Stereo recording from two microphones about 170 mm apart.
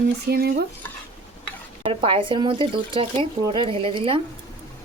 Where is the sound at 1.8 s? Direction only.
30° right (ahead or behind).